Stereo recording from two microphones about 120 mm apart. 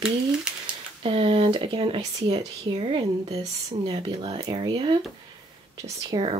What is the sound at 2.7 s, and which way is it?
Speech, 45° right (ahead or behind).